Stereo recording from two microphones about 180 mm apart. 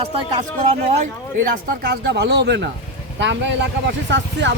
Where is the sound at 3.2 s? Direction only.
85° right.